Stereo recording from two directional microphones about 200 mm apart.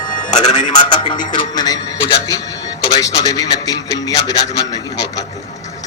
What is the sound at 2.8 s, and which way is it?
Speech, 20° left (ahead or behind).